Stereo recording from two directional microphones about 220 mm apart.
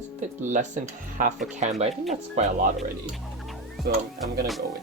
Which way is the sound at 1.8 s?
30° right (ahead or behind).